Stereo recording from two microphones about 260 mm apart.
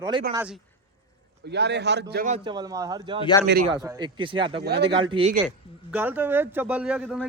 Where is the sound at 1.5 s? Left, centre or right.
Right.